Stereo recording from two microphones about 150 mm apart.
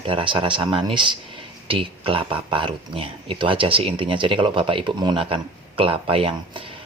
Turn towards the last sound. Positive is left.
turn(degrees=-35)  # may be behind; listen again after turning